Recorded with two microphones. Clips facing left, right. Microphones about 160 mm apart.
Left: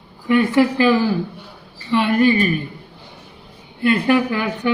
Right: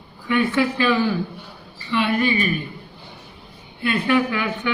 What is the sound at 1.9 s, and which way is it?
Speech, 40° left (ahead or behind).